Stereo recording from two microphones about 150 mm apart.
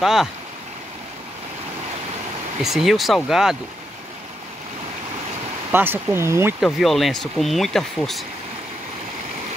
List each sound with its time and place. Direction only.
0.0 s speech: 5° right (ahead or behind)
2.6 s speech: 5° right (ahead or behind)
5.7 s speech: 15° right (ahead or behind)
6.6 s speech: centre (ahead or behind)